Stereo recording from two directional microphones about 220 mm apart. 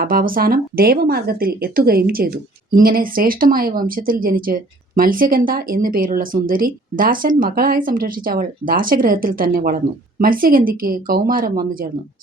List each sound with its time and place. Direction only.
0.0 s speech: 40° right (ahead or behind)